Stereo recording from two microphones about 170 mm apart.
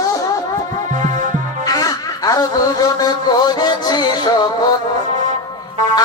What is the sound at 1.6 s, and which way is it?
Music, 20° left (ahead or behind).